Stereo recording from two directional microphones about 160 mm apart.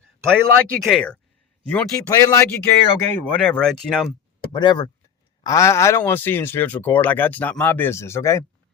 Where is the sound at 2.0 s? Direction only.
20° left (ahead or behind).